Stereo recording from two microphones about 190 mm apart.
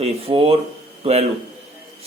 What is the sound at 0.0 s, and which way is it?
Speech, 30° right (ahead or behind).